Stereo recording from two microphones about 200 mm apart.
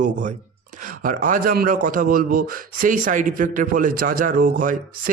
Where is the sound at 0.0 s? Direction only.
40° right (ahead or behind).